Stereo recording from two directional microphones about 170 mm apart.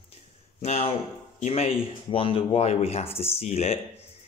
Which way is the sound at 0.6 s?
35° left (ahead or behind).